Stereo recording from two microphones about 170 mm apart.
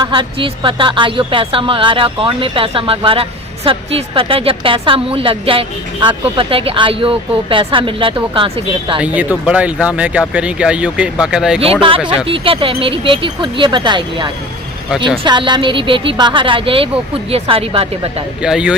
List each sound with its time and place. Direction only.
0.0 s speech: 30° right (ahead or behind)
9.0 s speech: 10° right (ahead or behind)
11.6 s speech: 35° right (ahead or behind)
14.8 s speech: centre (ahead or behind)
15.2 s speech: 25° right (ahead or behind)
18.4 s speech: 5° right (ahead or behind)